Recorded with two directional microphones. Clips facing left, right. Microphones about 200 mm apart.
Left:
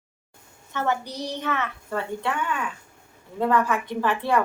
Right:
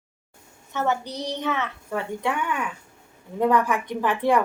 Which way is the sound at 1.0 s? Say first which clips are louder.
Right 1 dB; 10° left (ahead or behind).